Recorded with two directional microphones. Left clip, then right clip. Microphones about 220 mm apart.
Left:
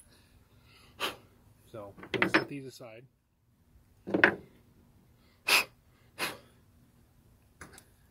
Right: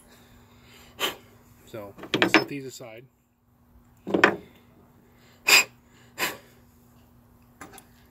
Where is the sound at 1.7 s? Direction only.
5° right (ahead or behind).